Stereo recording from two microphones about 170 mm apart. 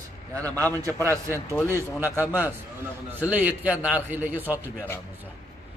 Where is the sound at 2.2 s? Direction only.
10° right (ahead or behind).